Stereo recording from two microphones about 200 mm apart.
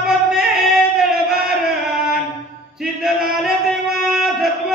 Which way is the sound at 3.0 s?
Centre (ahead or behind).